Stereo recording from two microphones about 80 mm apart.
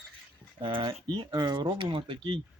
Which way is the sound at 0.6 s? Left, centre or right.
Right.